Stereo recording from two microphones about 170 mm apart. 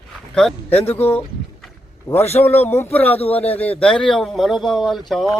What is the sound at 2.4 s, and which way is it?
Speech, 10° left (ahead or behind).